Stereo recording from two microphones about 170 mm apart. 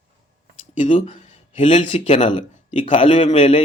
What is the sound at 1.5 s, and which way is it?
A man's voice, 45° left (ahead or behind).